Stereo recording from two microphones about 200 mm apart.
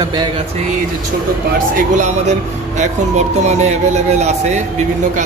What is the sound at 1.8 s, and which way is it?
Speech, 35° right (ahead or behind).